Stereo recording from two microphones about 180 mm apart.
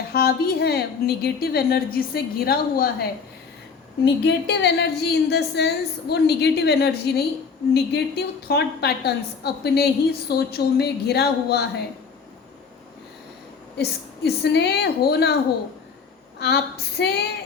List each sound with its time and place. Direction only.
0.1 s a woman's voice: 60° left (ahead or behind)
4.0 s a woman's voice: 70° left (ahead or behind)
14.3 s a woman's voice: 65° left (ahead or behind)
16.4 s a woman's voice: 65° left (ahead or behind)